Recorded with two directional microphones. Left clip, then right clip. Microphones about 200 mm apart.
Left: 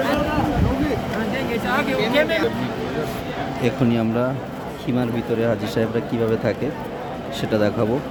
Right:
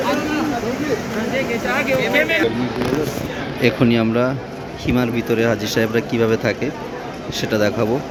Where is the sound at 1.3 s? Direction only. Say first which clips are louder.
Right 3 dB; 60° left (ahead or behind).